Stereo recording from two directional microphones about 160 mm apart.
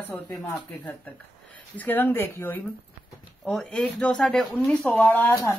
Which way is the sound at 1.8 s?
10° left (ahead or behind).